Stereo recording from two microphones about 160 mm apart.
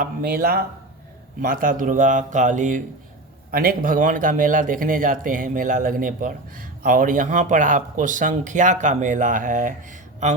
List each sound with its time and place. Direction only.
0.0 s a man's voice: 65° right (ahead or behind)
3.5 s speech: 65° right (ahead or behind)